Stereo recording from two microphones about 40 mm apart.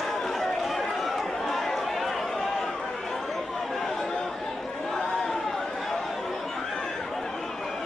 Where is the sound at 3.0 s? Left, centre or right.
Centre.